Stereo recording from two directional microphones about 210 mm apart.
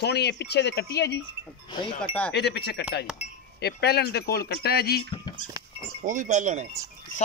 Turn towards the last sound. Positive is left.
turn(degrees=-35)  # may be behind; listen again after turning